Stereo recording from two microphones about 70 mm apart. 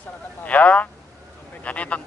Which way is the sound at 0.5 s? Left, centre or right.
Left.